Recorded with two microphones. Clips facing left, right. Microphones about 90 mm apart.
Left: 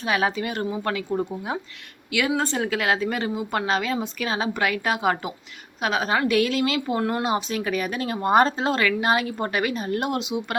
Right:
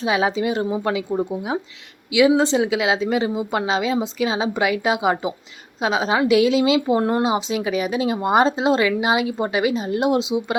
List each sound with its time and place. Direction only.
0.0 s speech: 20° right (ahead or behind)
2.3 s speech: 20° right (ahead or behind)
7.5 s speech: 15° right (ahead or behind)